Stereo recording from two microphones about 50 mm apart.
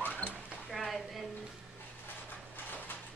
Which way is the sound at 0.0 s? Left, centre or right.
Left.